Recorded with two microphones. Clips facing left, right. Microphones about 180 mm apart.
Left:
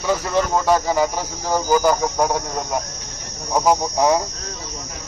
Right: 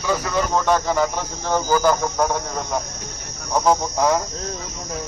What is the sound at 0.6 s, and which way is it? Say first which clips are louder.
Cricket: left 1 dB; 10° left (ahead or behind).